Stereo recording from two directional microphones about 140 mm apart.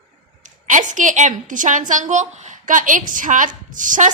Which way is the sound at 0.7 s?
65° right (ahead or behind).